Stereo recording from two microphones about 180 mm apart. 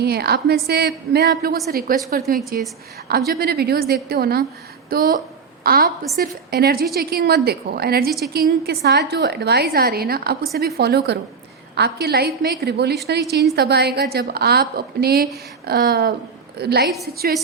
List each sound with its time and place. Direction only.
0.0 s a woman's voice: 60° right (ahead or behind)